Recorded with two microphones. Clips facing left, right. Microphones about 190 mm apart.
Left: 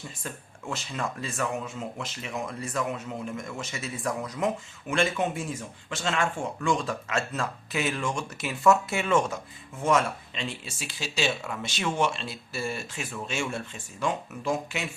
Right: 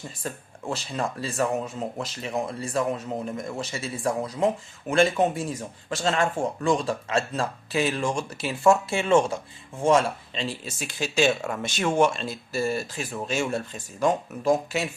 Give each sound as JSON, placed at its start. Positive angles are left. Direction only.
{"t": 0.2, "sound": "speech", "side_deg": -35}